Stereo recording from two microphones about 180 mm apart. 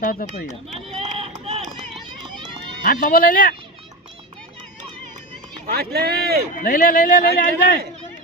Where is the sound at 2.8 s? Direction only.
50° left (ahead or behind).